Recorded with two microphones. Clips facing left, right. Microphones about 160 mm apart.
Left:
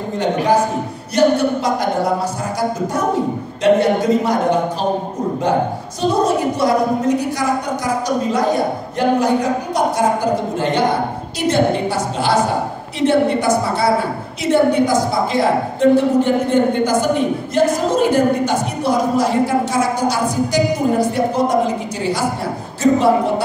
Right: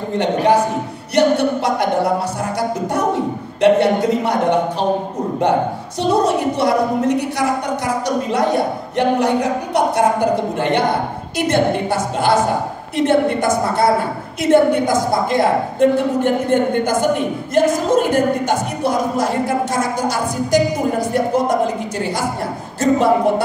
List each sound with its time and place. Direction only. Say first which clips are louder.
0.1 s a sound: right 1 dB; 65° right (ahead or behind)
1.1 s speech: even; 65° right (ahead or behind)
3.6 s speech: even; 65° right (ahead or behind)
6.2 s speech: even; 65° right (ahead or behind)
8.9 s a sound: even; 70° right (ahead or behind)
11.3 s speech: even; 55° right (ahead or behind)
22.8 s speech: left 1 dB; 50° right (ahead or behind)